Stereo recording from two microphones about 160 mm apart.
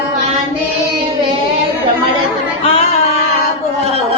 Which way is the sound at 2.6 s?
40° left (ahead or behind).